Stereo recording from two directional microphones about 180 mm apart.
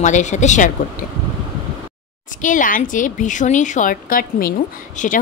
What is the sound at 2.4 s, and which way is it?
A woman's voice, 45° left (ahead or behind).